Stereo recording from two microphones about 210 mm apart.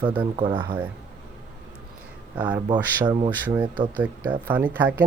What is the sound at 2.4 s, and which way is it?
Speech, 5° right (ahead or behind).